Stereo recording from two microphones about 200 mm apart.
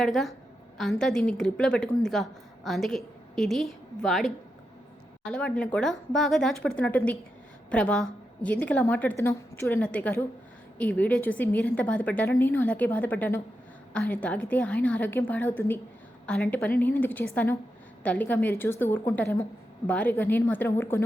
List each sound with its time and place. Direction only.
0.0 s a woman's voice: centre (ahead or behind)